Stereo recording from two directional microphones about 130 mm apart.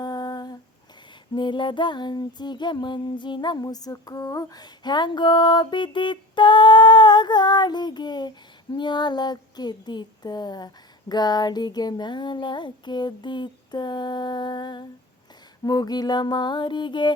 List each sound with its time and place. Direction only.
0.0 s humming: 35° left (ahead or behind)
1.4 s music: 35° left (ahead or behind)